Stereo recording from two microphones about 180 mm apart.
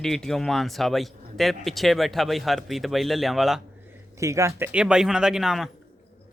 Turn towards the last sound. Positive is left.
turn(degrees=0)  # may be behind; listen again after turning